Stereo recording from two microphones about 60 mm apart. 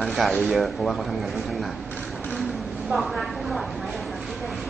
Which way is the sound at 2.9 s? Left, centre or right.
Centre.